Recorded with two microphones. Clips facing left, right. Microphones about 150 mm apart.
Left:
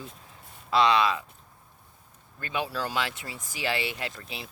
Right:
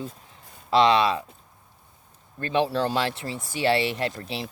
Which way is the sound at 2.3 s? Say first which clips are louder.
Right 8 dB; 30° right (ahead or behind).